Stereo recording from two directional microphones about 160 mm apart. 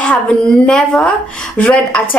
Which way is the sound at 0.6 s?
5° left (ahead or behind).